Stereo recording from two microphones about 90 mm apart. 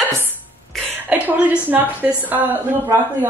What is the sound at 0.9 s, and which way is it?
A woman's voice, 20° right (ahead or behind).